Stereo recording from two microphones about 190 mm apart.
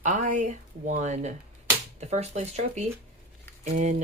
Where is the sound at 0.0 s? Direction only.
40° right (ahead or behind).